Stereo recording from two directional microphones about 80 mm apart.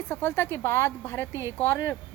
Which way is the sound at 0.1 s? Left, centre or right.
Left.